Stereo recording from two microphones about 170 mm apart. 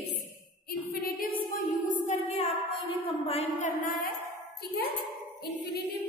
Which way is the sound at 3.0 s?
35° left (ahead or behind).